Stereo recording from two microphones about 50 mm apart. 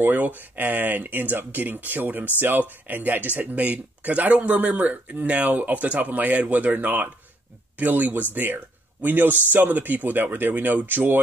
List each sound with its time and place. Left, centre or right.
0.0 s speech: right